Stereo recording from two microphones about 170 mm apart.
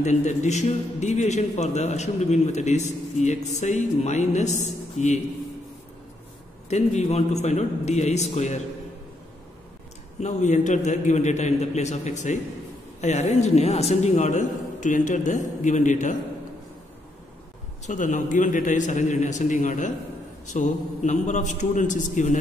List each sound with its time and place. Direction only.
0.0 s a man's voice: 40° left (ahead or behind)
6.7 s a man's voice: 40° left (ahead or behind)
10.2 s a man's voice: 45° left (ahead or behind)
17.8 s a man's voice: 50° left (ahead or behind)